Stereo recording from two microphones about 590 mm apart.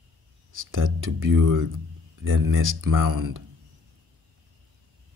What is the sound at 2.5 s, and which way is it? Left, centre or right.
Speech, centre.